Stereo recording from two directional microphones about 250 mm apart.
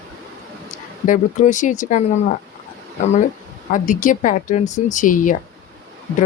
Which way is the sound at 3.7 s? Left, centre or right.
Left.